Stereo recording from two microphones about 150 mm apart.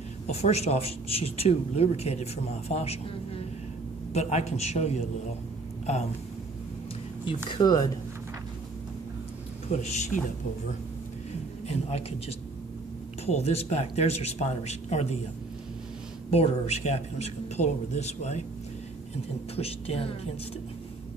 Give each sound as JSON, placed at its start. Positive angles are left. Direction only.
{"t": 0.3, "sound": "a woman's voice", "side_deg": 45}
{"t": 4.1, "sound": "a woman's voice", "side_deg": 50}
{"t": 7.4, "sound": "speech", "side_deg": 30}
{"t": 9.7, "sound": "a woman's voice", "side_deg": 50}
{"t": 11.6, "sound": "a woman's voice", "side_deg": 45}
{"t": 16.3, "sound": "a woman's voice", "side_deg": 45}
{"t": 19.5, "sound": "speech", "side_deg": 40}